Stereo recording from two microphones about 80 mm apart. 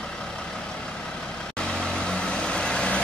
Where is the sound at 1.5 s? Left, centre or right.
Centre.